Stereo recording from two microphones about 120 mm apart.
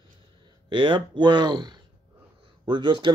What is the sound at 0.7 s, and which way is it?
Speech, 45° right (ahead or behind).